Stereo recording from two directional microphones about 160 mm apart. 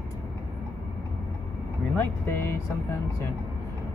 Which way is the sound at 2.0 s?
15° left (ahead or behind).